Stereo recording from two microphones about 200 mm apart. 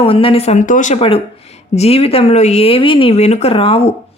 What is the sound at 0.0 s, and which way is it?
Speech, 25° left (ahead or behind).